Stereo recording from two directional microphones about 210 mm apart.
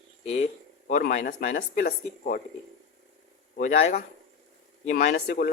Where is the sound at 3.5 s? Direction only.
35° left (ahead or behind).